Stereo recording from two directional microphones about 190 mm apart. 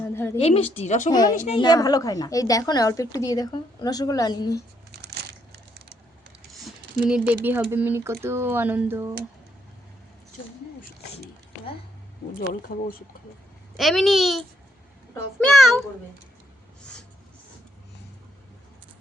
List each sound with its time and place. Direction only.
0.1 s a sound: 15° left (ahead or behind)
0.3 s a woman's voice: 35° left (ahead or behind)
1.1 s a woman's voice: 20° left (ahead or behind)
1.4 s a woman's voice: 35° left (ahead or behind)
1.6 s a woman's voice: 20° left (ahead or behind)
4.9 s crushing: 60° right (ahead or behind)
6.5 s a sound: centre (ahead or behind)
7.4 s speech: 10° right (ahead or behind)
12.4 s speech: 50° left (ahead or behind)
13.7 s a child's voice: centre (ahead or behind)
16.8 s a sound: 5° left (ahead or behind)